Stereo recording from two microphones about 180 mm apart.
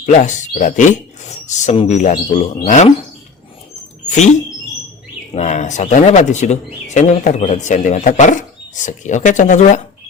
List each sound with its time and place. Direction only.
0.0 s speech: 40° left (ahead or behind)
4.1 s speech: 40° left (ahead or behind)